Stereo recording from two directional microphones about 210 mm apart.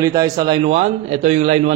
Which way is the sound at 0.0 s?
15° right (ahead or behind).